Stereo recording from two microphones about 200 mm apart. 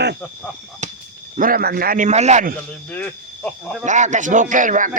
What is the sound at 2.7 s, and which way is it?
Speech, 5° left (ahead or behind).